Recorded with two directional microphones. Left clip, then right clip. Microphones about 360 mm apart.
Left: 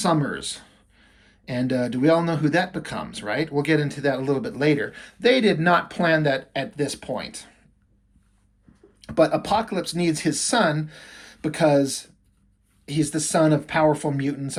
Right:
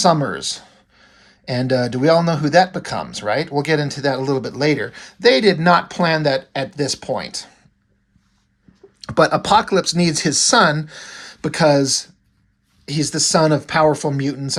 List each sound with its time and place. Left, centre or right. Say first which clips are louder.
0.0 s speech: right 7 dB; centre
9.0 s speech: right 4 dB; centre